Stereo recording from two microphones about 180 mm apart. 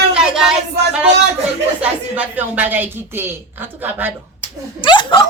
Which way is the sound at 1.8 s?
5° right (ahead or behind).